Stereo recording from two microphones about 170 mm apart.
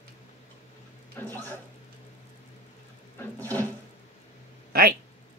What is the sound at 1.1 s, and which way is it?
Speech, 10° left (ahead or behind).